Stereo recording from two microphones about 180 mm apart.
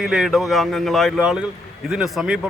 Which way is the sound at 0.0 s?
5° right (ahead or behind).